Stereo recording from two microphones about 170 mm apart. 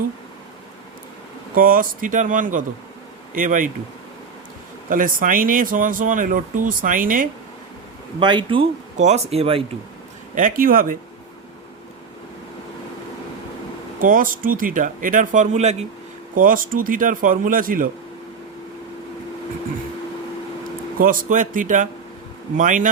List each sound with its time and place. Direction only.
1.5 s speech: 55° right (ahead or behind)
4.9 s speech: 55° right (ahead or behind)
8.2 s speech: 30° right (ahead or behind)
9.0 s speech: 40° right (ahead or behind)
10.3 s speech: 55° right (ahead or behind)
14.0 s speech: 55° right (ahead or behind)
16.3 s speech: 55° right (ahead or behind)
21.0 s speech: 55° right (ahead or behind)